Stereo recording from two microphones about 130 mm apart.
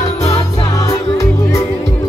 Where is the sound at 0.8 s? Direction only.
25° left (ahead or behind).